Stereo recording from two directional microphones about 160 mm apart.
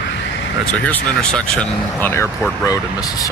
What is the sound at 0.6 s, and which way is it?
Speech, 5° left (ahead or behind).